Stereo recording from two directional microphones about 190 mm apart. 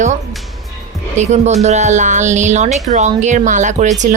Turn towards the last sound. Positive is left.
turn(degrees=-40)  # may be behind; listen again after turning